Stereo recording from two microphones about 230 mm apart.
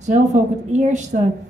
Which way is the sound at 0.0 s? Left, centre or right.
Right.